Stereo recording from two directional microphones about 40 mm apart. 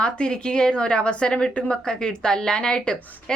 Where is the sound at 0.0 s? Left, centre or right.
Left.